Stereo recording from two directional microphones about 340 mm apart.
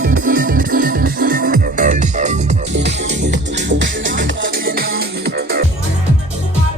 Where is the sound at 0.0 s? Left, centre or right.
Right.